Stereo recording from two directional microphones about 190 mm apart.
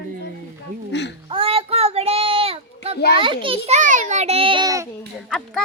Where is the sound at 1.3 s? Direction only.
30° right (ahead or behind).